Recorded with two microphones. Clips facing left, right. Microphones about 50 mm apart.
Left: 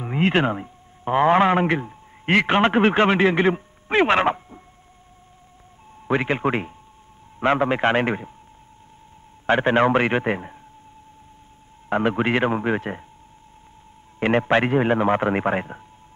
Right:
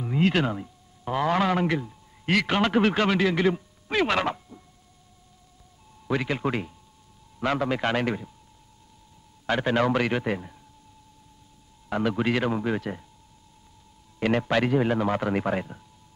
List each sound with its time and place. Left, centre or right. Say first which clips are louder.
0.0 s a man's voice: left 3 dB; left
6.0 s a man's voice: left 5 dB; left
9.5 s a man's voice: left 6 dB; left
11.9 s a man's voice: left 4 dB; left
14.2 s a man's voice: left 5 dB; left